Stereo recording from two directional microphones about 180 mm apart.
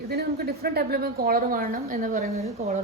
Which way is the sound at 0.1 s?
60° right (ahead or behind).